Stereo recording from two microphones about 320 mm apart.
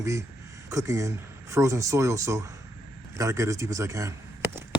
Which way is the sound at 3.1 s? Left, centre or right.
Centre.